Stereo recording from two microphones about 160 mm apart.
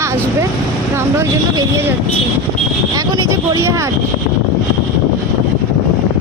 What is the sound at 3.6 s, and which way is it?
Speech, 20° right (ahead or behind).